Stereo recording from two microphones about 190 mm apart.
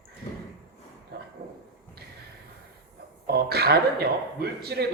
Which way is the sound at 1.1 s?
60° right (ahead or behind).